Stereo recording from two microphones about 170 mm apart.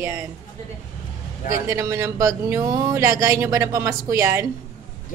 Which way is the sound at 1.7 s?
15° right (ahead or behind).